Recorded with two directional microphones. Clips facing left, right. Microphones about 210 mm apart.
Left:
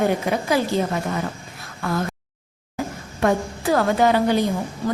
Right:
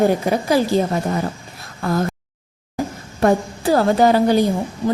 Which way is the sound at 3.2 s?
30° right (ahead or behind).